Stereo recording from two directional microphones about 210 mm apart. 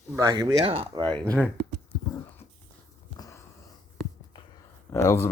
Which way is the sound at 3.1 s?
15° left (ahead or behind).